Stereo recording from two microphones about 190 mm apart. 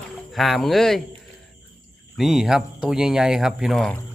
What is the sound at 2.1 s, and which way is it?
Speech, centre (ahead or behind).